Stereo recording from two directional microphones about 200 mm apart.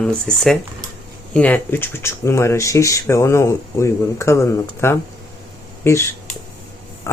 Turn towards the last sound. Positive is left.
turn(degrees=15)  # may be behind; listen again after turning